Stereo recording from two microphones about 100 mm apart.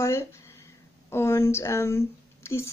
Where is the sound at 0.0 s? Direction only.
30° left (ahead or behind).